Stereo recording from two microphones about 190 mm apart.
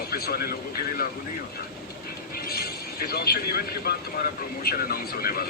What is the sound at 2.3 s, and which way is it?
Speech, 50° left (ahead or behind).